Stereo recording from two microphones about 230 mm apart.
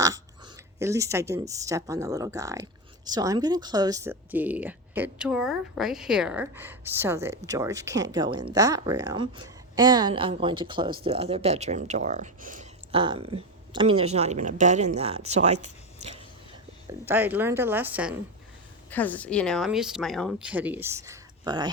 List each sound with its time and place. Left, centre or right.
0.0 s speech: centre; by 13.0 s right
13.0 s speech: right
17.1 s speech: centre
18.9 s speech: centre